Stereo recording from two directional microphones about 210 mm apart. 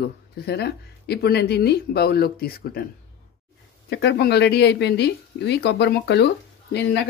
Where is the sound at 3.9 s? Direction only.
55° left (ahead or behind).